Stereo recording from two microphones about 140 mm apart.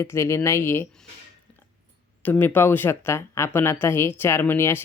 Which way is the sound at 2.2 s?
15° left (ahead or behind).